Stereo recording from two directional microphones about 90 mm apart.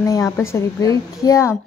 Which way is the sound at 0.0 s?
35° left (ahead or behind).